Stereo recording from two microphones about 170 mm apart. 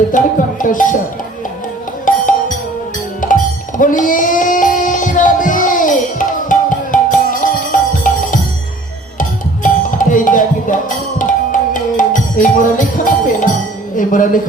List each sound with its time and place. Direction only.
0.1 s speech: 50° left (ahead or behind)
2.1 s music: 50° left (ahead or behind)
3.2 s music: 50° left (ahead or behind)
9.6 s music: 50° left (ahead or behind)
13.9 s speech: 50° left (ahead or behind)